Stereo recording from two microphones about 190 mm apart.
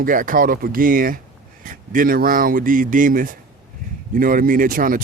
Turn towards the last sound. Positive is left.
turn(degrees=-50)  # may be behind; listen again after turning